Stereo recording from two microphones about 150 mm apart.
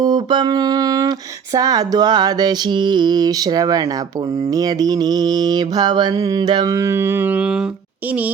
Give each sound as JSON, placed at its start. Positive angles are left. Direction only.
{"t": 0.0, "sound": "mantra", "side_deg": -30}